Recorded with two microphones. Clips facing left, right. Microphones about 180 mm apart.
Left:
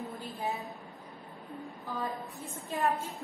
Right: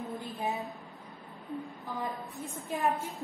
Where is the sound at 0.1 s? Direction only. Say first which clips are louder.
Right 1 dB; 20° right (ahead or behind).